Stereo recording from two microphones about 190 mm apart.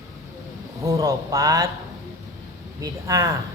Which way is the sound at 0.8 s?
15° right (ahead or behind).